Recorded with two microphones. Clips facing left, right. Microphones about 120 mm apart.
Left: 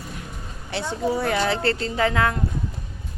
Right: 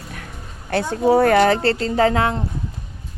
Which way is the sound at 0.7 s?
50° right (ahead or behind).